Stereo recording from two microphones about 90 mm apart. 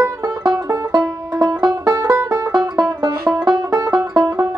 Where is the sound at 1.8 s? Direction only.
30° right (ahead or behind).